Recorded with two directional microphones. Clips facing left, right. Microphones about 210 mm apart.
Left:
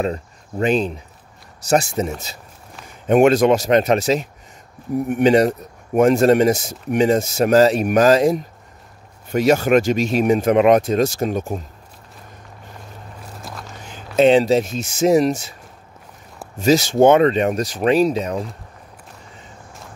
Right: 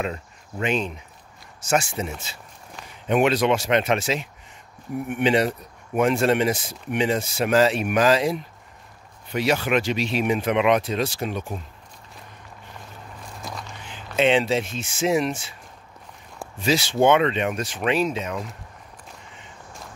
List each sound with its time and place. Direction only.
0.0 s speech: 35° left (ahead or behind)
13.4 s walk: centre (ahead or behind)
13.7 s speech: 45° left (ahead or behind)
16.5 s speech: 45° left (ahead or behind)